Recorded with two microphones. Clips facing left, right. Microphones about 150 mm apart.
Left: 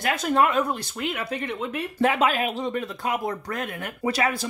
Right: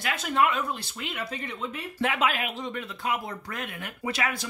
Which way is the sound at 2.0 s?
35° left (ahead or behind).